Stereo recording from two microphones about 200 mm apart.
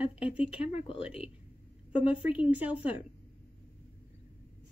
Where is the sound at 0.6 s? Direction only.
30° left (ahead or behind).